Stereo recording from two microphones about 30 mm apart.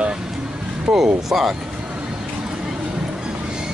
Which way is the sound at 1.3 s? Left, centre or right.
Centre.